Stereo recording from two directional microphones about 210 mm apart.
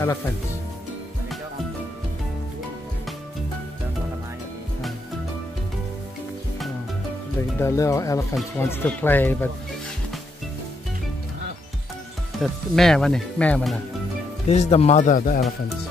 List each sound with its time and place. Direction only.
7.5 s speech: 15° left (ahead or behind)
12.4 s speech: centre (ahead or behind)
14.5 s speech: 30° left (ahead or behind)